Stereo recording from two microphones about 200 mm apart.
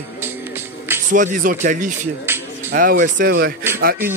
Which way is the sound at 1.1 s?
45° right (ahead or behind).